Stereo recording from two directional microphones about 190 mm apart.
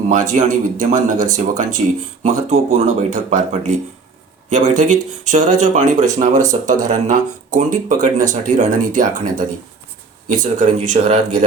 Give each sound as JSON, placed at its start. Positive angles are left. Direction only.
{"t": 0.1, "sound": "speech", "side_deg": -40}
{"t": 10.2, "sound": "speech", "side_deg": -40}